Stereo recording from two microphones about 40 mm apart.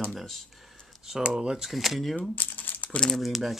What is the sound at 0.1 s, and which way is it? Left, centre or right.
Speech, centre.